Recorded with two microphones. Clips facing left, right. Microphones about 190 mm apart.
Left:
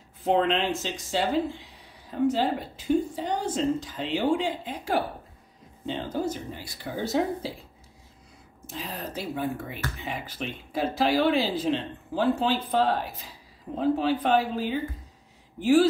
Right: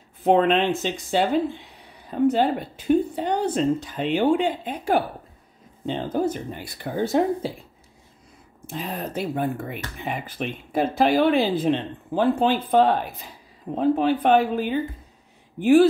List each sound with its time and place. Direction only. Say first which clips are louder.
0.2 s speech: right 5 dB; 60° right (ahead or behind)
8.6 s speech: right 5 dB; 55° right (ahead or behind)